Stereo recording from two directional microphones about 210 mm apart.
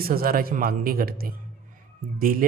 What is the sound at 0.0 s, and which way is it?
Speech, 45° right (ahead or behind).